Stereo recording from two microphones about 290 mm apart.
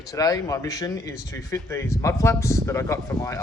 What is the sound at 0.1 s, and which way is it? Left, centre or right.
Speech, centre.